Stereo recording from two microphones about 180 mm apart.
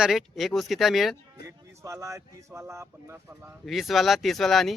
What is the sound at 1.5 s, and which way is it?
Speech, 15° right (ahead or behind).